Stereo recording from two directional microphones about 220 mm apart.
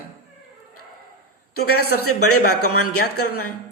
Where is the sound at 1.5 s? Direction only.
45° left (ahead or behind).